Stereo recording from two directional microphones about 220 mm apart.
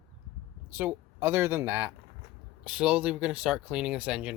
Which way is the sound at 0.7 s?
10° right (ahead or behind).